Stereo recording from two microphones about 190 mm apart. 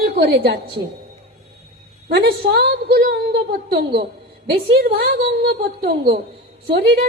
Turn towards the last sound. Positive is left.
turn(degrees=-55)  # may be behind; listen again after turning